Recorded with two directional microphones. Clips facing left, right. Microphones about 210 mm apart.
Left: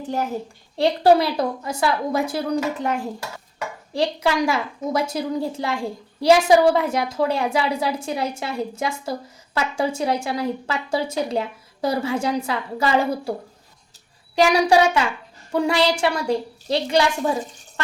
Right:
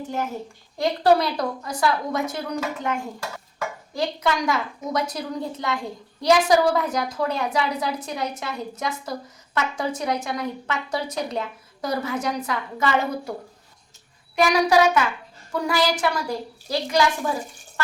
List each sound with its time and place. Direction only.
0.8 s a woman's voice: 30° left (ahead or behind)
14.3 s a woman's voice: 30° left (ahead or behind)